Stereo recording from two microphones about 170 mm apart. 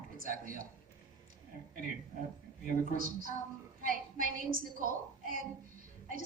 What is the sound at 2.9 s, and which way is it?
A woman's voice, 55° right (ahead or behind).